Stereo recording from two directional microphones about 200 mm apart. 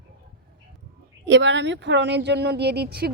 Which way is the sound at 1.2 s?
65° right (ahead or behind).